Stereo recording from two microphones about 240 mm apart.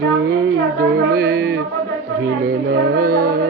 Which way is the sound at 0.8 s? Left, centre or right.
Right.